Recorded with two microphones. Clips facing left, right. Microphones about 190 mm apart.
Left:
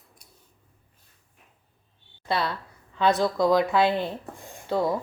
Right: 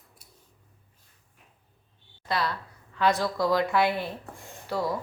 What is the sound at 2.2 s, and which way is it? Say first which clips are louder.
A woman's voice: left 2 dB; 25° left (ahead or behind).